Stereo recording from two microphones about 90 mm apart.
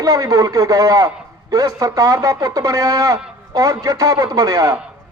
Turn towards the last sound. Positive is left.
turn(degrees=-35)  # may be behind; listen again after turning